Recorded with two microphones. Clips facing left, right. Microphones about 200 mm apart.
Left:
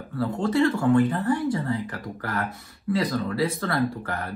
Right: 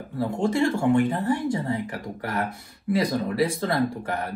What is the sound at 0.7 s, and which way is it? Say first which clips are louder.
Speech: even; 25° right (ahead or behind).